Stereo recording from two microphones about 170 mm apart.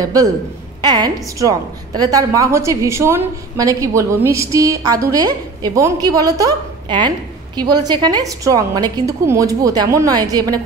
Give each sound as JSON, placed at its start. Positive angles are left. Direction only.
{"t": 0.0, "sound": "a woman's voice", "side_deg": -20}